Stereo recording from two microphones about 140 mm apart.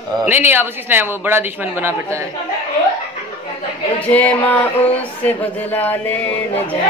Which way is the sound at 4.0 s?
10° left (ahead or behind).